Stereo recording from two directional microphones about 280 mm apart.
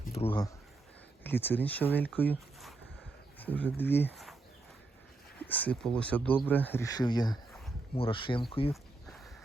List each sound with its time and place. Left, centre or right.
0.0 s a sound: left
0.3 s speech: centre
5.5 s speech: centre